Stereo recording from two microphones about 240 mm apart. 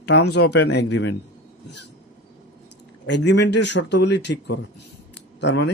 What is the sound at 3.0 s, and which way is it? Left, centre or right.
Speech, left.